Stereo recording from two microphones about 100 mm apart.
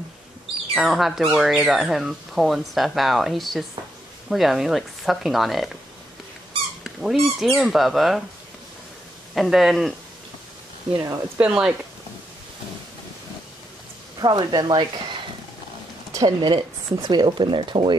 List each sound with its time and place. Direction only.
0.7 s speech: centre (ahead or behind)
6.8 s speech: centre (ahead or behind)
9.3 s speech: 5° right (ahead or behind)
11.3 s speech: 10° right (ahead or behind)
14.1 s speech: 45° right (ahead or behind)
16.1 s a sound: 35° right (ahead or behind)
16.3 s speech: 50° right (ahead or behind)